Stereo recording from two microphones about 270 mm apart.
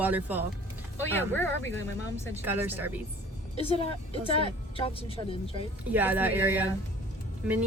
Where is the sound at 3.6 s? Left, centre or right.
Left.